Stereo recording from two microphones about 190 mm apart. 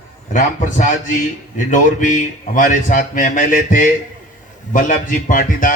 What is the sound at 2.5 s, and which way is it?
A man's voice, 45° left (ahead or behind).